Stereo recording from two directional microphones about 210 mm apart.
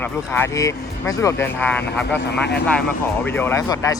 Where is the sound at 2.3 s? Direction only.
55° left (ahead or behind).